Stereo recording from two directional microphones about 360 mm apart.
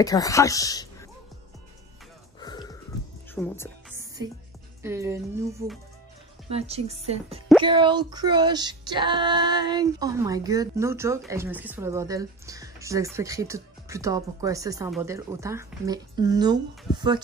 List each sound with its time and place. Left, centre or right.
0.0 s a woman's voice: centre
3.3 s speech: centre
3.9 s music: centre
4.8 s speech: centre